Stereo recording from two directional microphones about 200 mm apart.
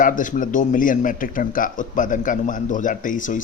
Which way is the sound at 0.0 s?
40° left (ahead or behind).